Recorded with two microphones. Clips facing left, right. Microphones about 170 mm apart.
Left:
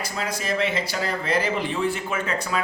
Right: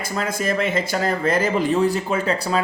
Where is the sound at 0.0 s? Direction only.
50° right (ahead or behind).